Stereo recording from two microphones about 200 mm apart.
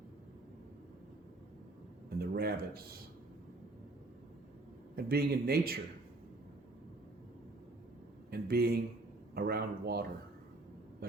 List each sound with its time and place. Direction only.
2.0 s speech: 50° right (ahead or behind)
4.9 s speech: 50° right (ahead or behind)
8.3 s speech: 50° right (ahead or behind)